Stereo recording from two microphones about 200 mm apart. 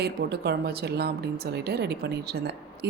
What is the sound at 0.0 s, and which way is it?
A woman's voice, 55° right (ahead or behind).